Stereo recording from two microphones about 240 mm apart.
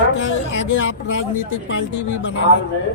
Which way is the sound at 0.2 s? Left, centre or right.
Left.